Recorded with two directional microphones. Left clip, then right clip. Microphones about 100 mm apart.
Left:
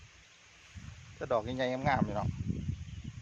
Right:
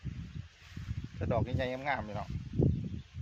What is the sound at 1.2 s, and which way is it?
Speech, 50° left (ahead or behind).